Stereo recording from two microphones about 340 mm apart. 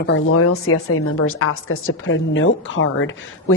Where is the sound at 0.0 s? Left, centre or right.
Left.